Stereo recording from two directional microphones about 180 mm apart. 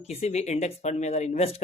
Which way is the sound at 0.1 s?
35° left (ahead or behind).